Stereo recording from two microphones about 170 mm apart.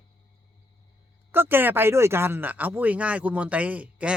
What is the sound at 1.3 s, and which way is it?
A man's voice, 10° right (ahead or behind).